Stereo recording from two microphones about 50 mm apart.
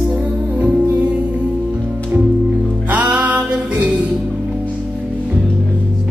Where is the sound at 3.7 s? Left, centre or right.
Right.